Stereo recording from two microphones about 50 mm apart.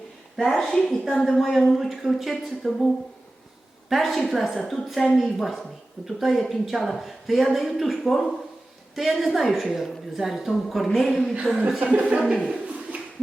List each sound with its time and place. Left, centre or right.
0.3 s speech: centre
11.8 s speech: right